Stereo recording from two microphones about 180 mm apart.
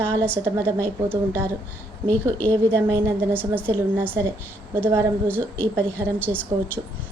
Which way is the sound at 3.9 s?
10° right (ahead or behind).